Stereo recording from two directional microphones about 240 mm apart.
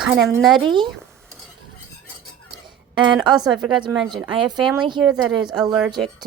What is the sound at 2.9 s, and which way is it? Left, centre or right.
Speech, centre.